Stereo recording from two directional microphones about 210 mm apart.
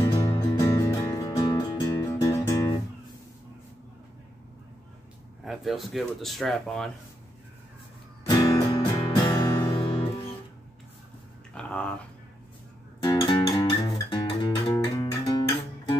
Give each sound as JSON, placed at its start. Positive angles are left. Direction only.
{"t": 0.0, "sound": "music", "side_deg": 15}
{"t": 5.4, "sound": "speech", "side_deg": 0}
{"t": 8.3, "sound": "music", "side_deg": 20}
{"t": 11.5, "sound": "a sound", "side_deg": 5}
{"t": 13.0, "sound": "music", "side_deg": 20}